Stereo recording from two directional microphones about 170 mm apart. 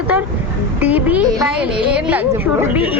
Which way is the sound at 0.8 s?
10° right (ahead or behind).